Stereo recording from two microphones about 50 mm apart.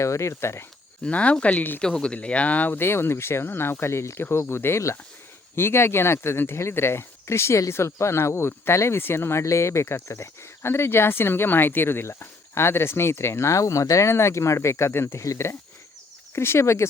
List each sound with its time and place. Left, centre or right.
0.0 s speech: left
1.0 s speech: left
2.8 s speech: left
9.0 s speech: left
16.3 s speech: left